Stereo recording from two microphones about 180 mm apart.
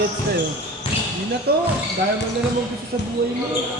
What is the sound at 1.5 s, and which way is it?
Speech, 60° right (ahead or behind).